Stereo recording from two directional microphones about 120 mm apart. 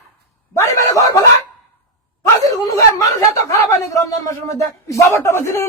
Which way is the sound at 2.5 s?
30° left (ahead or behind).